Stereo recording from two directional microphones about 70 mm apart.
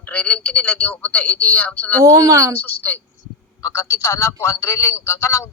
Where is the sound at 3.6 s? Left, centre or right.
Left.